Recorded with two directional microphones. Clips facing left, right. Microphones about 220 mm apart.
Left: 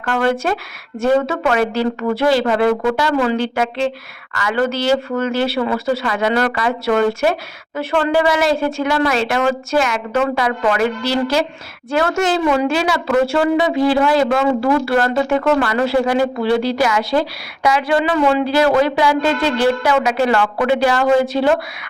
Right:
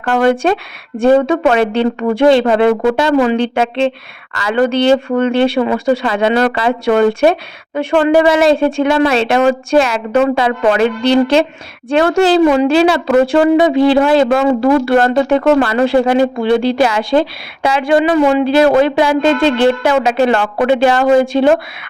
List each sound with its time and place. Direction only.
0.1 s a woman's voice: 25° right (ahead or behind)